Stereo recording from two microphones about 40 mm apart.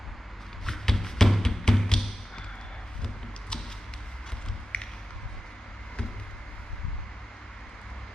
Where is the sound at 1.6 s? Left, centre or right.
Centre.